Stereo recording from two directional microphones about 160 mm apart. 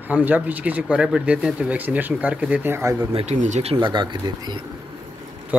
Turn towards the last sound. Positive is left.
turn(degrees=-10)  # may be behind; listen again after turning